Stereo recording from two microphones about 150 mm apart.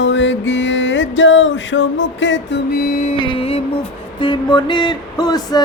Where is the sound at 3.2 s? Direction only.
40° left (ahead or behind).